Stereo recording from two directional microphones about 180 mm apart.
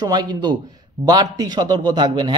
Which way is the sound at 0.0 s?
25° right (ahead or behind).